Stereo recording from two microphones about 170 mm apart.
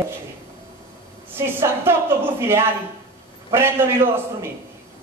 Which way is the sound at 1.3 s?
15° right (ahead or behind).